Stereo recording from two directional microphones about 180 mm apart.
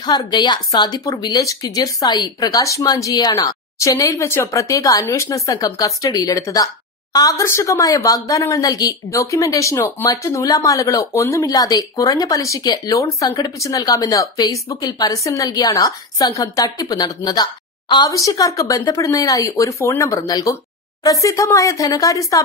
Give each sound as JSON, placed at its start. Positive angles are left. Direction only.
{"t": 0.0, "sound": "speech", "side_deg": 20}